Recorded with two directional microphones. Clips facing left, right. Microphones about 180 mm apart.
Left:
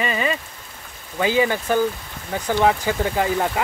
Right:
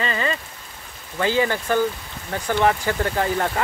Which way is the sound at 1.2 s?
15° left (ahead or behind).